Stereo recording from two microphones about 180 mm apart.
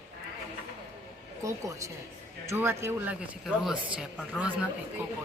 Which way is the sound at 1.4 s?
15° right (ahead or behind).